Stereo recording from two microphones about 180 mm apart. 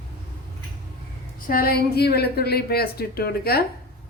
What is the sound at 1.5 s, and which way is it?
A woman's voice, 55° left (ahead or behind).